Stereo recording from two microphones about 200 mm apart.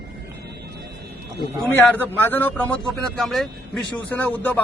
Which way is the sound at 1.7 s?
10° left (ahead or behind).